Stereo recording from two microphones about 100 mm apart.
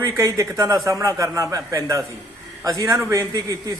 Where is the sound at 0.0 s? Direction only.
35° right (ahead or behind).